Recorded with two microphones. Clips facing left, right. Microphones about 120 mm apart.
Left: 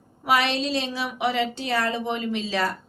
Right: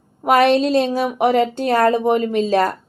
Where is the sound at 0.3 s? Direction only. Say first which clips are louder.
Right 9 dB; 50° right (ahead or behind).